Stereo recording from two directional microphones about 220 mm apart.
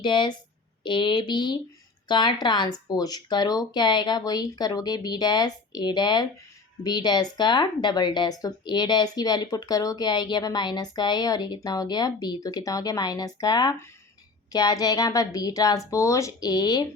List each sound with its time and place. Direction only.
0.0 s a woman's voice: 20° left (ahead or behind)